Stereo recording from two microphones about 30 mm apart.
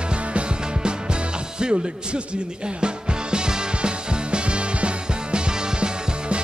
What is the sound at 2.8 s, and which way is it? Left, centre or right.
Music, right.